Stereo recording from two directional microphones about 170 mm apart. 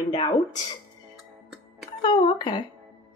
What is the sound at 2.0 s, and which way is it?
Speech, 25° left (ahead or behind).